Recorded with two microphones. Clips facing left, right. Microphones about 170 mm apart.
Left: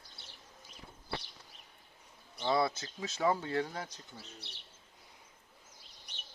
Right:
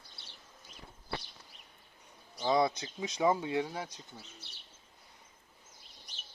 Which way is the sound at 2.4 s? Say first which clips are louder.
Right 2 dB; 15° right (ahead or behind).